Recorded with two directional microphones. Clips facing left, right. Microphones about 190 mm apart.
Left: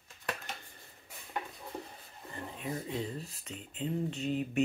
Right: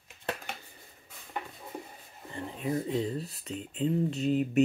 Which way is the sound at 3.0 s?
35° right (ahead or behind).